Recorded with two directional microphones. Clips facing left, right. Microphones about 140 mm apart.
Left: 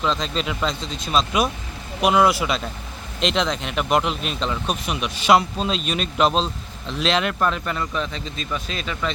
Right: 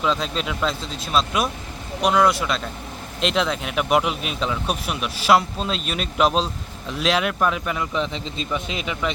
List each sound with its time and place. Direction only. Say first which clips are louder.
0.0 s speech: even; 5° right (ahead or behind)
7.9 s a man's voice: right 2 dB; 20° right (ahead or behind)